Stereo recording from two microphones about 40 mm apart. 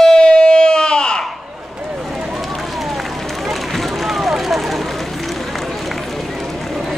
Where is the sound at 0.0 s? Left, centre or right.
Centre.